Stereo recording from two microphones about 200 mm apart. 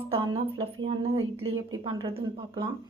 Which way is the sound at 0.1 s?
25° right (ahead or behind).